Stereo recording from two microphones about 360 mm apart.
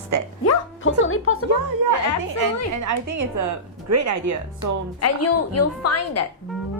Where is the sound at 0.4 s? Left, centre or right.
Left.